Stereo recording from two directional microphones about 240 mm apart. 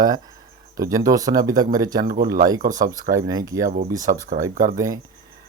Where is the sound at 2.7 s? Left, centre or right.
Centre.